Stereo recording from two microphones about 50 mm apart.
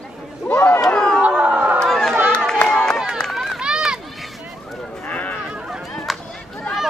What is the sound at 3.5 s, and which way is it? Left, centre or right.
Run, centre.